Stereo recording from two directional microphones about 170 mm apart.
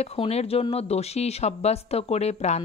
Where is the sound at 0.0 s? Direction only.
35° left (ahead or behind).